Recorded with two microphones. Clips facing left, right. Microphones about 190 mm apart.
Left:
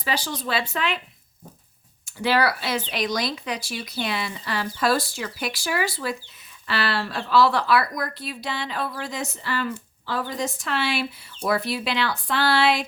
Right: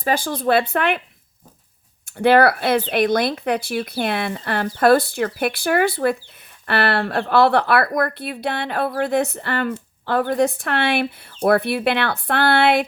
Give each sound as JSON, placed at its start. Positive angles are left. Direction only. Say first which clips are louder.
{"t": 0.0, "sound": "speech", "louder": "right 7 dB", "side_deg": -50}
{"t": 2.1, "sound": "speech", "louder": "right 8 dB", "side_deg": -55}